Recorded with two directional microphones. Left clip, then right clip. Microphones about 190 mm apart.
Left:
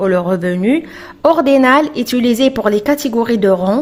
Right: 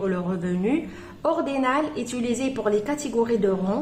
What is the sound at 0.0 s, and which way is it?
A woman's voice, 40° left (ahead or behind).